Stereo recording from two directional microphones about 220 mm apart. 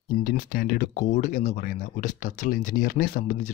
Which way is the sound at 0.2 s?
40° left (ahead or behind).